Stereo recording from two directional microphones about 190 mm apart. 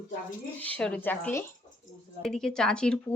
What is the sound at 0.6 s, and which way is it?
Speech, 5° left (ahead or behind).